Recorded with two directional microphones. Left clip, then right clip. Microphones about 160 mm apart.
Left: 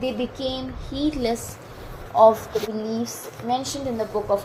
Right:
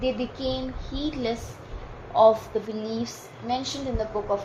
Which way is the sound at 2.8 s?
45° left (ahead or behind).